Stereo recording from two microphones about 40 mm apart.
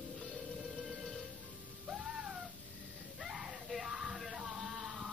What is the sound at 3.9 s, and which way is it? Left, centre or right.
Yell, centre.